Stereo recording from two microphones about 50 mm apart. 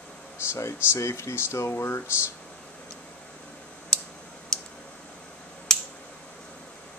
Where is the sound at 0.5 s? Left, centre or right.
Left.